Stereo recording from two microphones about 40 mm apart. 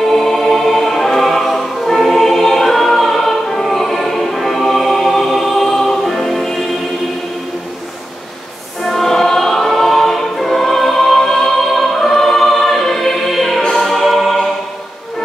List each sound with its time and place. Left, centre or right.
0.0 s music: centre
8.8 s choir: centre
13.6 s music: centre
13.8 s music: centre